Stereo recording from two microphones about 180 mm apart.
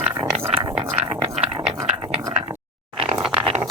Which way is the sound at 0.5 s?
35° right (ahead or behind).